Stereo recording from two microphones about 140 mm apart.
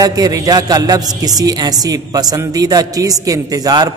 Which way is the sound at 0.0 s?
25° right (ahead or behind).